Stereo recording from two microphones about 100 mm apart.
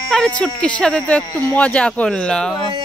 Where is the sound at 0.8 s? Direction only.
10° left (ahead or behind).